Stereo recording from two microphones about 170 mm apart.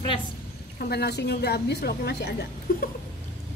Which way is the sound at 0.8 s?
70° left (ahead or behind).